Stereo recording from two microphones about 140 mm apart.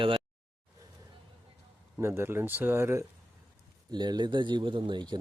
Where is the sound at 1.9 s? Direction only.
20° right (ahead or behind).